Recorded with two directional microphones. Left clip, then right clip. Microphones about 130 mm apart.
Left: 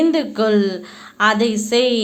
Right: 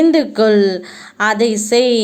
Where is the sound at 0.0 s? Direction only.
30° right (ahead or behind).